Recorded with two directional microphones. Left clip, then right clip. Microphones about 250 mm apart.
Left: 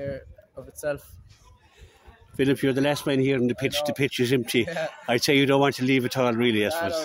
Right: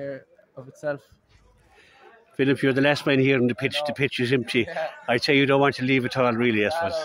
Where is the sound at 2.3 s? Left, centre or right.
Centre.